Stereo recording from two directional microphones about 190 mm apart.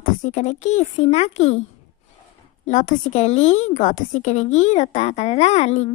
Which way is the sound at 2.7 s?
40° left (ahead or behind).